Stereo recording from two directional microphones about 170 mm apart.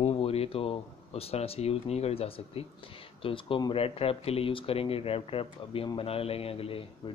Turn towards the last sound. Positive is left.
turn(degrees=35)  # may be behind; listen again after turning